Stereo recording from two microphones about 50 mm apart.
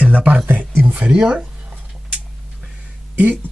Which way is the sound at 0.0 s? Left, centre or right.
Right.